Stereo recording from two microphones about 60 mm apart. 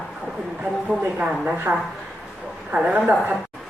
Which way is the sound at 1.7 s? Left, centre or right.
Right.